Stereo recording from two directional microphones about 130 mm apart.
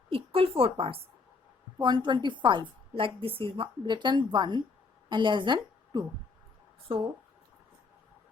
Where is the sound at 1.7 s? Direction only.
35° right (ahead or behind).